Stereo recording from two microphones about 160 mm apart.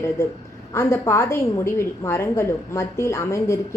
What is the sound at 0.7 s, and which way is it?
A woman's voice, 15° left (ahead or behind).